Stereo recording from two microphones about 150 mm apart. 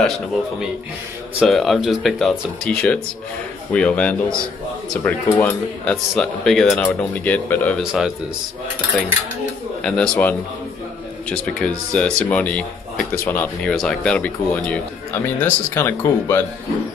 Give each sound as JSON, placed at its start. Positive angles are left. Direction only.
{"t": 0.0, "sound": "speech", "side_deg": 0}
{"t": 3.7, "sound": "speech", "side_deg": 10}
{"t": 7.8, "sound": "speech", "side_deg": -5}
{"t": 9.8, "sound": "speech", "side_deg": 5}